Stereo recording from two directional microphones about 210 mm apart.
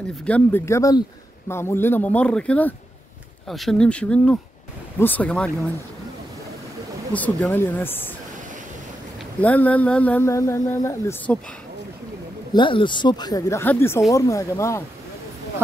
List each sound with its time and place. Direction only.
0.2 s speech: 10° left (ahead or behind)
7.1 s speech: 5° left (ahead or behind)
9.4 s speech: 5° left (ahead or behind)
12.5 s speech: 25° left (ahead or behind)